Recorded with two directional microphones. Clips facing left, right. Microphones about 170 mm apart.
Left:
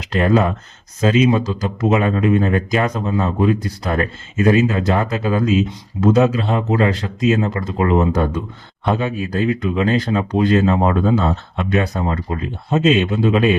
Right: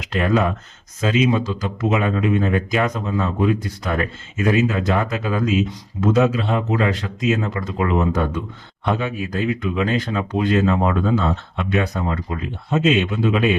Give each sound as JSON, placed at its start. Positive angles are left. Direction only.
{"t": 0.0, "sound": "speech", "side_deg": 35}